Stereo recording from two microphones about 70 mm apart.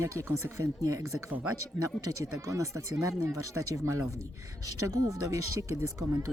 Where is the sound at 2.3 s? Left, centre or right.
Right.